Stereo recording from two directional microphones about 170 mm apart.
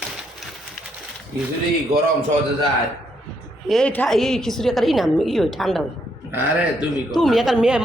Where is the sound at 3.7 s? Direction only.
5° left (ahead or behind).